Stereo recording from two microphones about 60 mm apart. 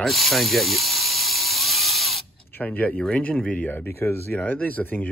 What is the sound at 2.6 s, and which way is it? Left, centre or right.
Speech, left.